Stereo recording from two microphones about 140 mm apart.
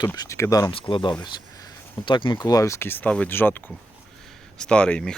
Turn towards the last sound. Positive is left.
turn(degrees=5)  # may be behind; listen again after turning